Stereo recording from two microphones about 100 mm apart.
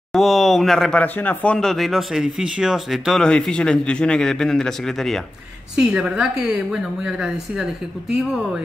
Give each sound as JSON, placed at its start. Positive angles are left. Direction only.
{"t": 0.1, "sound": "a sound", "side_deg": 0}
{"t": 1.0, "sound": "speech", "side_deg": 15}
{"t": 5.8, "sound": "a woman's voice", "side_deg": -5}